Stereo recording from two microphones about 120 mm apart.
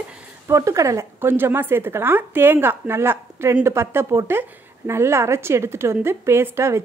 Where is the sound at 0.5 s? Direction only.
25° right (ahead or behind).